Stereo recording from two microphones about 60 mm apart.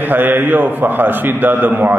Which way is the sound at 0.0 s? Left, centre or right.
Right.